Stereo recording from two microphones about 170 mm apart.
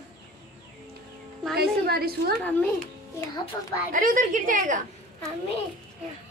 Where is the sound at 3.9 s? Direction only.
50° right (ahead or behind).